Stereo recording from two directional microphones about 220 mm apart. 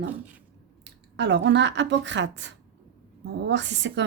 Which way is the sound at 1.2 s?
55° right (ahead or behind).